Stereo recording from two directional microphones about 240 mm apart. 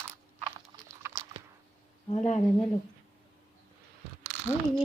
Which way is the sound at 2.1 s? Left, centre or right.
Left.